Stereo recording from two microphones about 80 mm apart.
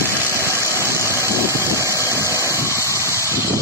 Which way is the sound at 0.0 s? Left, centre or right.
Left.